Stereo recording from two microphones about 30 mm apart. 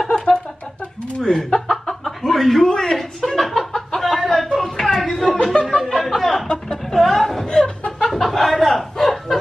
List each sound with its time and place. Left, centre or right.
0.1 s a sound: left
1.2 s speech: centre
1.7 s chicken: centre
2.6 s chuckle: centre
4.0 s a sound: centre
5.5 s chuckle: left
5.9 s chuckle: centre
6.4 s chuckle: centre
6.8 s chuckle: centre
7.4 s chuckle: left
8.1 s a sound: centre